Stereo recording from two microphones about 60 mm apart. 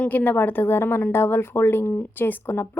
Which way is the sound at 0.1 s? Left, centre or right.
Left.